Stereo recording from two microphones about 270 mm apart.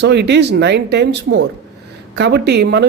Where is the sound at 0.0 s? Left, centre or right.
Right.